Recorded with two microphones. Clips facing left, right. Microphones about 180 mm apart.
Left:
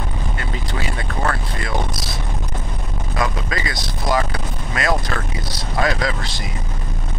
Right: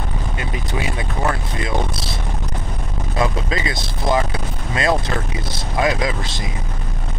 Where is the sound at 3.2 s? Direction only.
25° right (ahead or behind).